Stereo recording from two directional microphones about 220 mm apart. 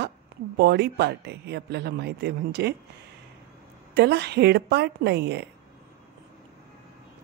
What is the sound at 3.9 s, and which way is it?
A woman's voice, 50° right (ahead or behind).